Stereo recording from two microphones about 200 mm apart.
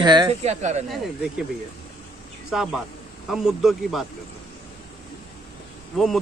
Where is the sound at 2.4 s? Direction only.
Centre (ahead or behind).